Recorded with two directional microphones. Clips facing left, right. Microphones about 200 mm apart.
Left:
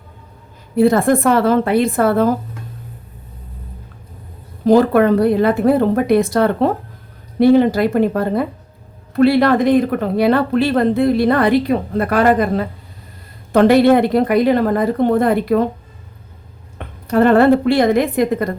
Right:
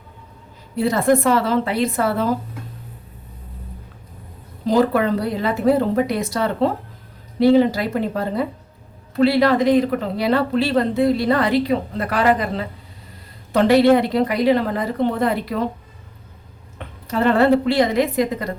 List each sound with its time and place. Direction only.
0.8 s a woman's voice: 50° left (ahead or behind)
4.6 s a woman's voice: 55° left (ahead or behind)
16.7 s a woman's voice: 55° left (ahead or behind)